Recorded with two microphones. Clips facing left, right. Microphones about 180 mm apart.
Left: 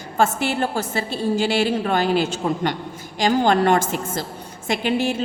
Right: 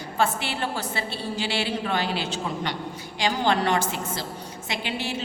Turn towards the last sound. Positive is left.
turn(degrees=50)  # may be behind; listen again after turning